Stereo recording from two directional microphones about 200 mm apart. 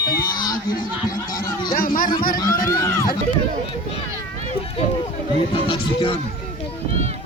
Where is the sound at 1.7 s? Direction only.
45° left (ahead or behind).